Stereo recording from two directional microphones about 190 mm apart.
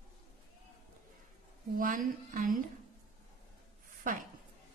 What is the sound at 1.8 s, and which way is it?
Speech, 45° right (ahead or behind).